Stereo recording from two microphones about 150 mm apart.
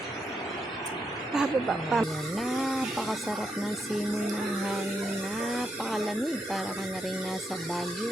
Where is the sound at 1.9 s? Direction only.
Centre (ahead or behind).